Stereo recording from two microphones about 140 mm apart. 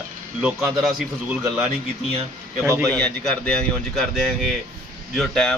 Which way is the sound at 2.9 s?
5° left (ahead or behind).